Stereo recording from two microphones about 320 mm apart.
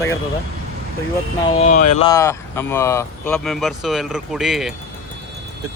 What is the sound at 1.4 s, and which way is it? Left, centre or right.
Speech, centre.